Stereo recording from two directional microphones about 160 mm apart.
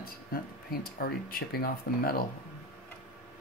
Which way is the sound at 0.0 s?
70° left (ahead or behind).